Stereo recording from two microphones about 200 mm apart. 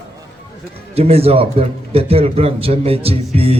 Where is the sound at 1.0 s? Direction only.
30° right (ahead or behind).